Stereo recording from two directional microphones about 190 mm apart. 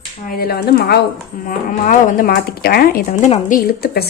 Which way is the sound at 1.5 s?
45° left (ahead or behind).